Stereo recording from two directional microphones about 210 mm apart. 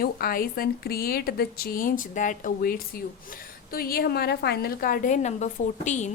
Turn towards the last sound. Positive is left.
turn(degrees=35)  # may be behind; listen again after turning